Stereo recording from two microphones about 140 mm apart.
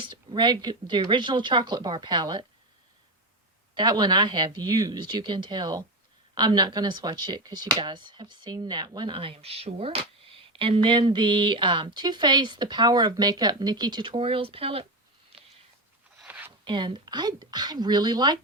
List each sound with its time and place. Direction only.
0.0 s speech: 35° right (ahead or behind)
3.8 s speech: 30° right (ahead or behind)
16.2 s a sound: 15° right (ahead or behind)
16.6 s speech: 35° right (ahead or behind)